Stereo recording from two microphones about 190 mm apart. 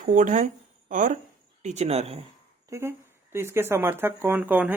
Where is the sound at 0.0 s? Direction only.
45° right (ahead or behind).